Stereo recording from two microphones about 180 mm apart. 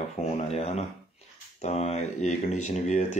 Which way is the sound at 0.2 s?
35° left (ahead or behind).